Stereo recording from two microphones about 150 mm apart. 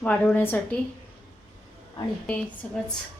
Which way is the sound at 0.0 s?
10° left (ahead or behind).